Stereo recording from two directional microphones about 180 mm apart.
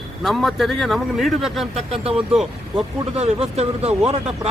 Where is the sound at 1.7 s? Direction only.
35° right (ahead or behind).